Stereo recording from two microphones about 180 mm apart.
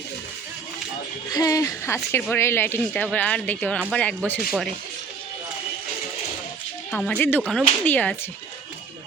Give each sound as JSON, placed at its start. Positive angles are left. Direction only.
{"t": 1.3, "sound": "speech", "side_deg": 20}
{"t": 6.9, "sound": "speech", "side_deg": 5}